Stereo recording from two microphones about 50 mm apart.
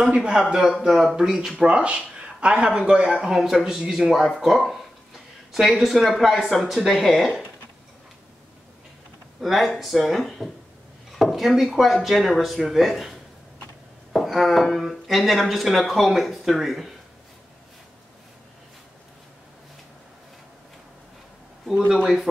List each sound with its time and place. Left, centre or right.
0.0 s a man's voice: right
0.8 s speech: centre
1.7 s a man's voice: right
4.4 s a sound: centre
6.1 s speech: centre
9.4 s speech: centre
22.0 s speech: centre